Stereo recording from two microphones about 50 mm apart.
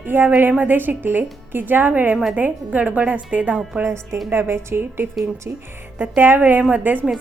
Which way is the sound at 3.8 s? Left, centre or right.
Right.